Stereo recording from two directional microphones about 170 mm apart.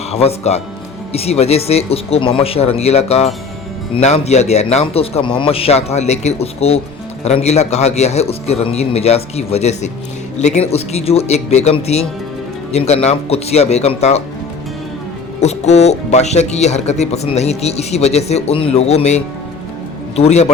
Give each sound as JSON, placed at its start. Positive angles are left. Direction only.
{"t": 0.1, "sound": "speech", "side_deg": 35}
{"t": 15.4, "sound": "speech", "side_deg": 40}